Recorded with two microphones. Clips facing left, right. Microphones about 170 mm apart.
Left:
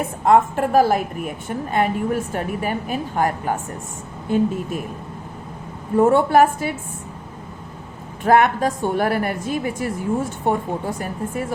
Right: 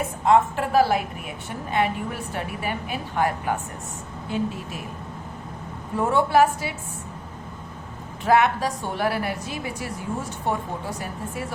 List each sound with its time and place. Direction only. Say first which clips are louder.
0.3 s a woman's voice: left 3 dB; 45° left (ahead or behind)
6.0 s a woman's voice: left 5 dB; 50° left (ahead or behind)
8.2 s a woman's voice: left 4 dB; 50° left (ahead or behind)